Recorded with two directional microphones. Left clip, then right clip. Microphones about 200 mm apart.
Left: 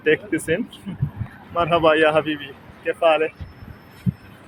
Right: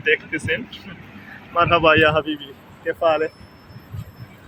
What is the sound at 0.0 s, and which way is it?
Speech, 25° left (ahead or behind).